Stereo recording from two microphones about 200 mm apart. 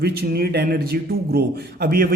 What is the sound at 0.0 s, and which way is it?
A man's voice, 50° right (ahead or behind).